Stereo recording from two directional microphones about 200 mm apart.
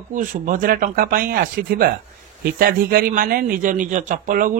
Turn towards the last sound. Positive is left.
turn(degrees=-40)  # may be behind; listen again after turning